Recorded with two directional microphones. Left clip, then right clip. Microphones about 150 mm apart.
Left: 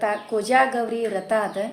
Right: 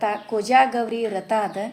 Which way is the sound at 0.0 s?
25° right (ahead or behind).